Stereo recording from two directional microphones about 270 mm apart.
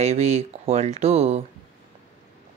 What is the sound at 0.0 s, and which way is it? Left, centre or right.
Speech, right.